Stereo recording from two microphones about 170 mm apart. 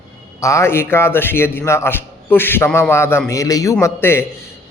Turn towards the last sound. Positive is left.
turn(degrees=15)  # may be behind; listen again after turning